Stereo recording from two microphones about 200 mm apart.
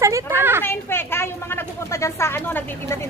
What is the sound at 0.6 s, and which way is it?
A woman's voice, 10° left (ahead or behind).